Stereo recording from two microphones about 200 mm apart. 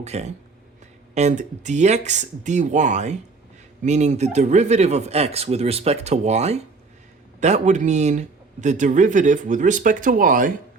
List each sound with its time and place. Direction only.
0.0 s speech: 35° right (ahead or behind)